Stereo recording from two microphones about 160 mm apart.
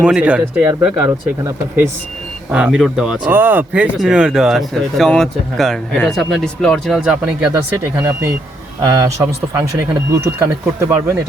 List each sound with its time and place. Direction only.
0.0 s speech: 5° right (ahead or behind)
2.5 s speech: 10° right (ahead or behind)
7.9 s speech: 15° right (ahead or behind)
10.1 s speech: 15° right (ahead or behind)